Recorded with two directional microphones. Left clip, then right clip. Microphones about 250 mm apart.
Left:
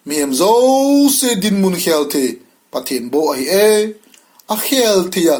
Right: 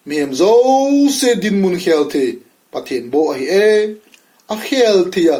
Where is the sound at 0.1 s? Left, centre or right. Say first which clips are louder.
Right 1 dB; left.